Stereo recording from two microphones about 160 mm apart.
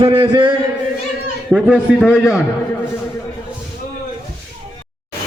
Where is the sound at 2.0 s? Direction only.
10° left (ahead or behind).